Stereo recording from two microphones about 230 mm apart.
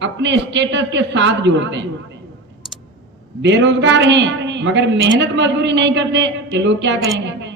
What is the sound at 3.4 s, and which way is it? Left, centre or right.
A woman's voice, right.